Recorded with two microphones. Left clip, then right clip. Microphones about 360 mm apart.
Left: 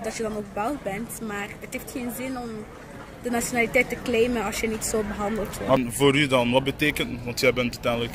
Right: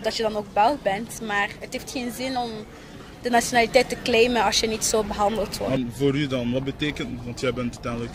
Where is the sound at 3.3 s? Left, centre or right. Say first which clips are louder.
Right 5 dB; right.